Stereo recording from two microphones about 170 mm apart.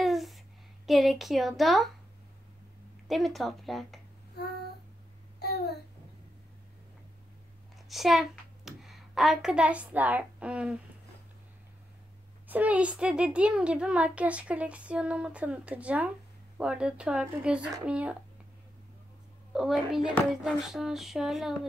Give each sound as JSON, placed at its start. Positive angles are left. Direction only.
{"t": 0.0, "sound": "a sound", "side_deg": 0}
{"t": 0.8, "sound": "hands", "side_deg": 0}
{"t": 3.1, "sound": "hands", "side_deg": 0}
{"t": 5.4, "sound": "a sound", "side_deg": 70}
{"t": 7.9, "sound": "a child's voice", "side_deg": 0}
{"t": 12.4, "sound": "a child's voice", "side_deg": -10}
{"t": 19.5, "sound": "hands", "side_deg": -5}